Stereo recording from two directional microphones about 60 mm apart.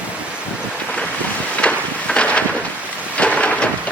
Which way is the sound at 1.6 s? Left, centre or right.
Centre.